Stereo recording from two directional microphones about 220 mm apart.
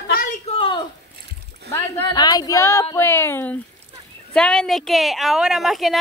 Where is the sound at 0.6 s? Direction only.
25° left (ahead or behind).